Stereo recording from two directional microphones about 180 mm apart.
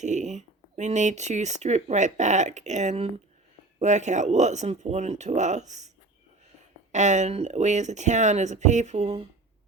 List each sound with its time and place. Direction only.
0.0 s speech: 40° right (ahead or behind)
6.9 s speech: 40° right (ahead or behind)